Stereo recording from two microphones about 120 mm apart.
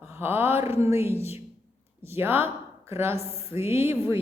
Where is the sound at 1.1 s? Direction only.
60° left (ahead or behind).